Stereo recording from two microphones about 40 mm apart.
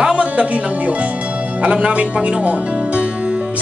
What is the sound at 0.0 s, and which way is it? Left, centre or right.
Music, right.